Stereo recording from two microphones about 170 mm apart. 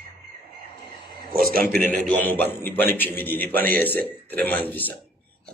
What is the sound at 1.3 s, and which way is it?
Speech, 60° right (ahead or behind).